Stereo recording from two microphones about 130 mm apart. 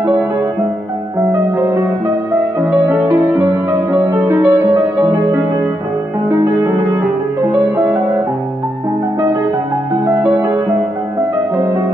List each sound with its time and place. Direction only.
2.9 s music: 15° right (ahead or behind)
3.7 s music: 25° right (ahead or behind)